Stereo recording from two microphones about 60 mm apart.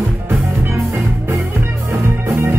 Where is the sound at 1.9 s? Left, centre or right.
Right.